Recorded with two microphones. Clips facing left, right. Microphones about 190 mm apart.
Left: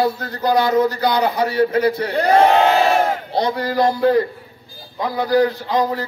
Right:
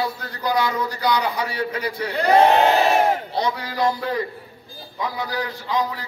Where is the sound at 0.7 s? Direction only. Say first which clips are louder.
Left 6 dB; 50° left (ahead or behind).